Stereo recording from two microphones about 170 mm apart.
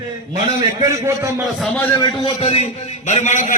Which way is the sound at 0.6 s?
20° right (ahead or behind).